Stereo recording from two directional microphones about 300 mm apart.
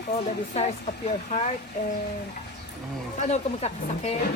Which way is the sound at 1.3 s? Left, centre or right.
Left.